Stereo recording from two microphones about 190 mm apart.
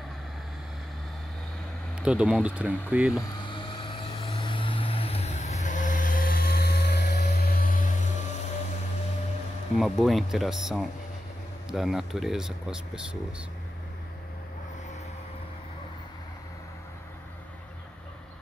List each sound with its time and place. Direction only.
2.0 s speech: 5° right (ahead or behind)
3.4 s vehicle: 25° left (ahead or behind); by 8.1 s 45° left (ahead or behind)
9.8 s speech: centre (ahead or behind)